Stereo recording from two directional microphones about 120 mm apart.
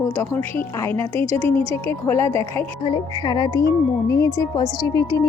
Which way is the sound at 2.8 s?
40° left (ahead or behind).